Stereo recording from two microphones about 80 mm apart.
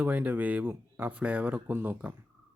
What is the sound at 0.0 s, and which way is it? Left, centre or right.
Speech, right.